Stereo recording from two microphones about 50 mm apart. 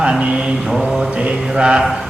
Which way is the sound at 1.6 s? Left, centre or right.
Centre.